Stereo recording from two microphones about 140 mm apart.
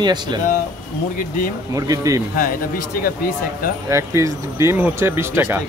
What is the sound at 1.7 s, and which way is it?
Speech, 25° right (ahead or behind).